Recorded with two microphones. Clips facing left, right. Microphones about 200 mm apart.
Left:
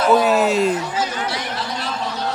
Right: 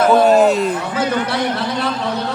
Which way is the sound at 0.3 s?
Centre (ahead or behind).